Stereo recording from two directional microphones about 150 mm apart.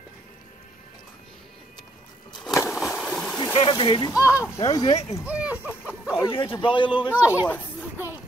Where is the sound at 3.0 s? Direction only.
5° left (ahead or behind).